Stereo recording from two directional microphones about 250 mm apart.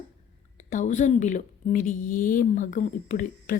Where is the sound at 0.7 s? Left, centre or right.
Left.